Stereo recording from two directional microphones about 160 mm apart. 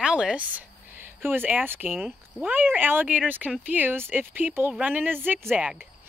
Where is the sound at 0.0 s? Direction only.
5° right (ahead or behind).